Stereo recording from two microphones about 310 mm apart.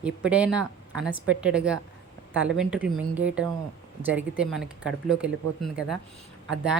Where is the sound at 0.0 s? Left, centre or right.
Centre.